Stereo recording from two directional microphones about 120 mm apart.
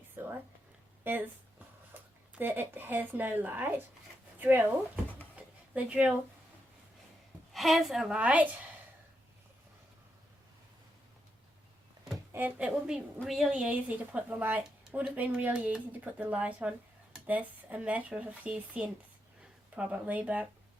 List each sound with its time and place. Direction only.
0.2 s a sound: 15° right (ahead or behind)
1.0 s a woman's voice: 15° right (ahead or behind)
4.4 s a sound: 15° right (ahead or behind)
5.7 s a woman's voice: 10° right (ahead or behind)
7.5 s a woman's voice: centre (ahead or behind)
12.3 s a woman's voice: 15° right (ahead or behind)